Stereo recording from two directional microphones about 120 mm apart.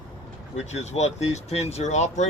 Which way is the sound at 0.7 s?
70° left (ahead or behind).